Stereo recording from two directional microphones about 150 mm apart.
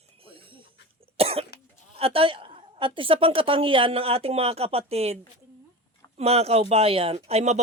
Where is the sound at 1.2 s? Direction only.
40° right (ahead or behind).